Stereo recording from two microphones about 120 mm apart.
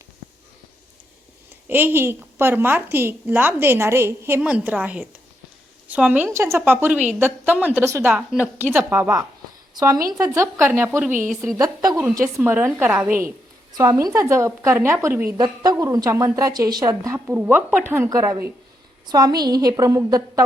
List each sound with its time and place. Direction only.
1.6 s a woman's voice: 15° right (ahead or behind)
4.4 s a woman's voice: 10° right (ahead or behind)
8.1 s a woman's voice: 5° right (ahead or behind)
9.7 s a woman's voice: 30° right (ahead or behind)
11.3 s a woman's voice: centre (ahead or behind)
11.5 s a woman's voice: 30° right (ahead or behind)
12.4 s a woman's voice: 15° right (ahead or behind)
15.4 s a woman's voice: 35° right (ahead or behind)
17.3 s a woman's voice: 15° right (ahead or behind)